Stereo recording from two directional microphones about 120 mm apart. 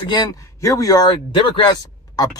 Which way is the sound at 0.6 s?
30° left (ahead or behind).